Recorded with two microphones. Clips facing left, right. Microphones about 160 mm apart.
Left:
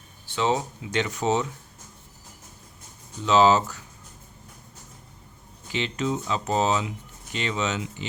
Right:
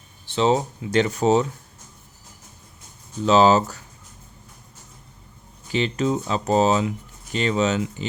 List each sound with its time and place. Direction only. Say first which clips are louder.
0.3 s speech: right 5 dB; 35° right (ahead or behind)
3.2 s speech: right 3 dB; 35° right (ahead or behind)
5.7 s speech: right 5 dB; 40° right (ahead or behind)